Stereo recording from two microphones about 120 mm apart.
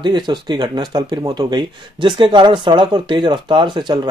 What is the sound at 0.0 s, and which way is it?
Speech, 40° right (ahead or behind).